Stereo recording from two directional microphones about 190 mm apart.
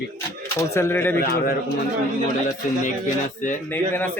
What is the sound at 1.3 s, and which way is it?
Speech, 55° left (ahead or behind).